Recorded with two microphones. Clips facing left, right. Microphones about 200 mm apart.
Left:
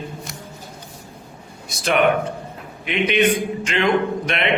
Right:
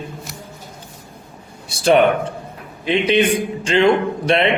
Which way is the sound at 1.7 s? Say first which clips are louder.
Right 4 dB; 30° right (ahead or behind).